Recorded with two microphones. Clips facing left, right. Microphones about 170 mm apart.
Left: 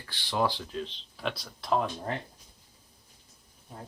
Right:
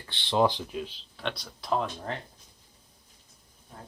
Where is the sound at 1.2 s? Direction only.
Centre (ahead or behind).